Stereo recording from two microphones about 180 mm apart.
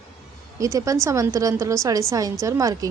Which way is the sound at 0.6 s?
15° right (ahead or behind).